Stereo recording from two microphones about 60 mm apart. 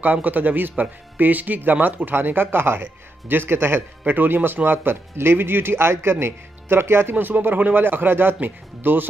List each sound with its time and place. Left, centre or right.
0.0 s speech: right